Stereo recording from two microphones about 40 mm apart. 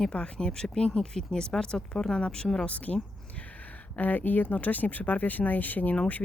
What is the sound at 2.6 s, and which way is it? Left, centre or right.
Speech, left.